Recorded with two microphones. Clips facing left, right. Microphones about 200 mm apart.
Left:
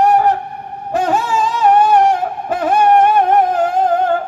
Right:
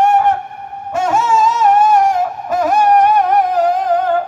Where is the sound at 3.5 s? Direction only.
50° left (ahead or behind).